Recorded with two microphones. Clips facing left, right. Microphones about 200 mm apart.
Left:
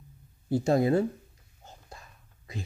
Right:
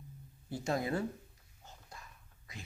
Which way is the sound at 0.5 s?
30° left (ahead or behind).